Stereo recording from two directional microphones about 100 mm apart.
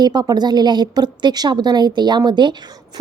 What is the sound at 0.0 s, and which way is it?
A woman's voice, 45° right (ahead or behind).